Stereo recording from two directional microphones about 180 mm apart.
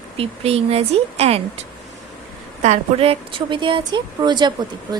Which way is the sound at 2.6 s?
35° right (ahead or behind).